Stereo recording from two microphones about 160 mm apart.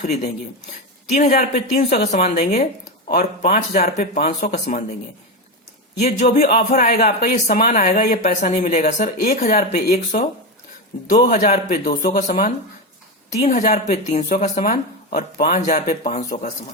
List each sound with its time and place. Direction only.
1.0 s speech: 45° left (ahead or behind)
6.1 s speech: 65° left (ahead or behind)
11.3 s speech: 60° left (ahead or behind)